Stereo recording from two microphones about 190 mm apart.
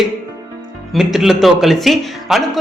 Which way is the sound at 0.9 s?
Centre (ahead or behind).